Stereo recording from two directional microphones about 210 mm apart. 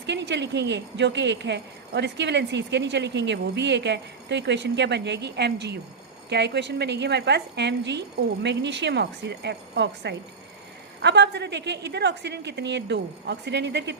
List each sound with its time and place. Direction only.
0.0 s a woman's voice: 55° right (ahead or behind)